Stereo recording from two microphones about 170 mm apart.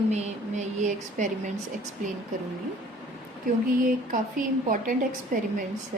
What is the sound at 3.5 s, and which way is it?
A woman's voice, 55° right (ahead or behind).